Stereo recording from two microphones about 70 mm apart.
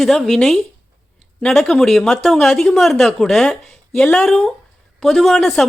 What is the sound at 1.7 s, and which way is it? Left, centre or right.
Speech, centre.